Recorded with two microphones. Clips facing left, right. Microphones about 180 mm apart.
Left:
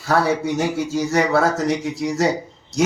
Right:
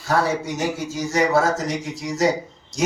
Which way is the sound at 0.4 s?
65° left (ahead or behind).